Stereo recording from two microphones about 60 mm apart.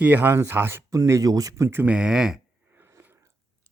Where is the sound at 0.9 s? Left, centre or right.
Right.